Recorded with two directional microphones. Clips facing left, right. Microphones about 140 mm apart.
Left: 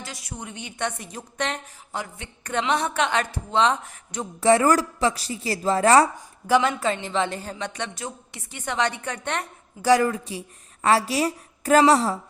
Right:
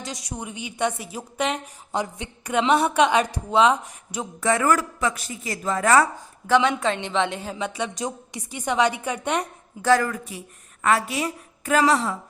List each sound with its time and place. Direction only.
0.0 s a woman's voice: 20° right (ahead or behind)
4.4 s a woman's voice: 30° left (ahead or behind)
6.5 s a woman's voice: centre (ahead or behind)
10.0 s a woman's voice: 30° left (ahead or behind)